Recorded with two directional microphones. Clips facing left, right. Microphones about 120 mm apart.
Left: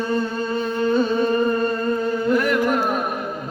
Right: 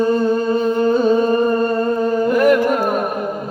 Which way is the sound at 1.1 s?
40° right (ahead or behind).